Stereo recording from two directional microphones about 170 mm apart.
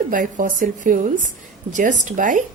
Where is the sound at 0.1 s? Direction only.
50° right (ahead or behind).